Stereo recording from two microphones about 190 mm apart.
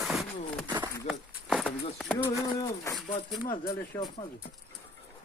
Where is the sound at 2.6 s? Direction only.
15° left (ahead or behind).